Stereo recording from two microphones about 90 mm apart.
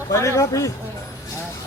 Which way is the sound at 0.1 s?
35° left (ahead or behind).